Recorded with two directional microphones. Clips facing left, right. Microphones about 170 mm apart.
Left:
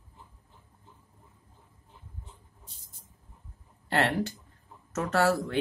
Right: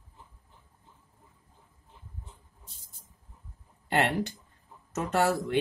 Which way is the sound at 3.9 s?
15° right (ahead or behind).